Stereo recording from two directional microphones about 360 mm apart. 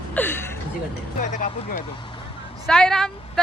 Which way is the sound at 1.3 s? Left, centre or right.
Left.